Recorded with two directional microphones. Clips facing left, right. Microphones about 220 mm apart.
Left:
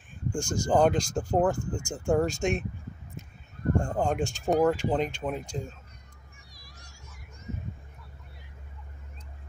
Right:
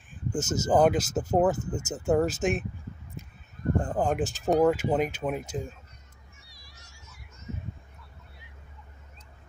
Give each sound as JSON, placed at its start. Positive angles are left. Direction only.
{"t": 0.3, "sound": "speech", "side_deg": -5}
{"t": 3.8, "sound": "speech", "side_deg": -5}
{"t": 6.5, "sound": "a sound", "side_deg": 45}